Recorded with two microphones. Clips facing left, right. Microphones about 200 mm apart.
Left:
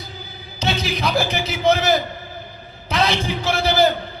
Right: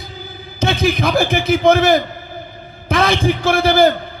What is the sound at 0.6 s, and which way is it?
A man's voice, 50° right (ahead or behind).